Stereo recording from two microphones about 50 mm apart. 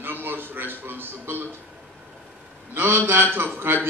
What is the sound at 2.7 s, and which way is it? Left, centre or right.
A man's voice, right.